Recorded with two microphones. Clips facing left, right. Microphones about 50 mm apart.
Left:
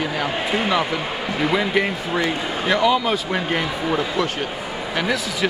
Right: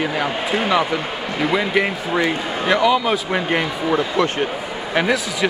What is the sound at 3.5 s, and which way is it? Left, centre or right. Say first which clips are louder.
Speech: right 3 dB; centre.